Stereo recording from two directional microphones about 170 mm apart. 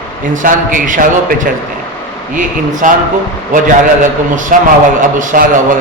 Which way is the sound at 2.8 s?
50° right (ahead or behind).